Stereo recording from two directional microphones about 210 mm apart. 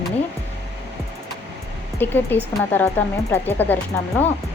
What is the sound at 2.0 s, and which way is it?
A woman's voice, 10° left (ahead or behind).